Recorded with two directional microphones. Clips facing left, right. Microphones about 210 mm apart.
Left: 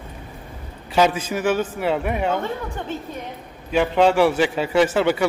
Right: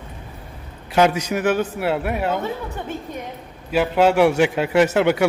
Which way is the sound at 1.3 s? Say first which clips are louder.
Right 1 dB; 10° right (ahead or behind).